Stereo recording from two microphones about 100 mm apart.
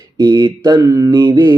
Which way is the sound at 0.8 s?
30° right (ahead or behind).